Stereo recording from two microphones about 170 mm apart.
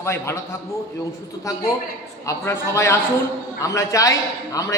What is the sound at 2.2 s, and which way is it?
A man's voice, 15° left (ahead or behind).